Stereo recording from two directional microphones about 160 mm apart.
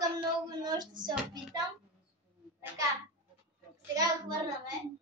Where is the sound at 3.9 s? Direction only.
20° right (ahead or behind).